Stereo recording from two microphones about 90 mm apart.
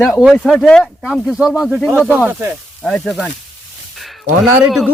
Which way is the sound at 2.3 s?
25° right (ahead or behind).